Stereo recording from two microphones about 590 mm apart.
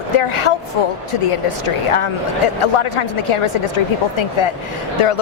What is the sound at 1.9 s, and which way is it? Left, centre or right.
A woman's voice, left.